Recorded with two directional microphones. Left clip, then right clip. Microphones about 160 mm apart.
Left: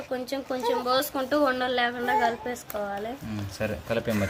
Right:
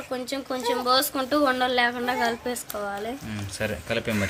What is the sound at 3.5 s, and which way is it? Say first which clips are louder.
Speech: right 1 dB; 5° right (ahead or behind).